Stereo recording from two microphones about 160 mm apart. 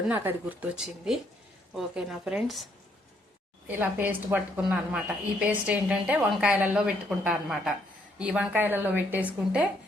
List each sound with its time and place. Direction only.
0.1 s speech: 10° right (ahead or behind)
3.7 s a woman's voice: 10° right (ahead or behind)